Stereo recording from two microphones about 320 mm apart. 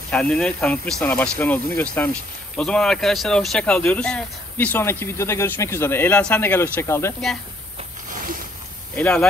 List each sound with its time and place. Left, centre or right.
0.1 s speech: centre
8.1 s a sound: right
8.9 s speech: centre